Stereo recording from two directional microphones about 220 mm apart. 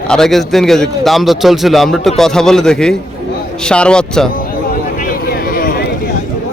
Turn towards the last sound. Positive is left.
turn(degrees=40)  # may be behind; listen again after turning